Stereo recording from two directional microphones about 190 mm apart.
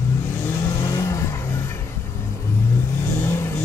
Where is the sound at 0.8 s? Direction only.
15° left (ahead or behind).